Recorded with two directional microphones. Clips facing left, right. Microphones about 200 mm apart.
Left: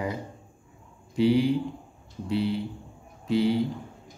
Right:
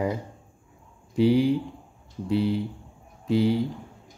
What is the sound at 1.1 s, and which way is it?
Speech, 45° right (ahead or behind).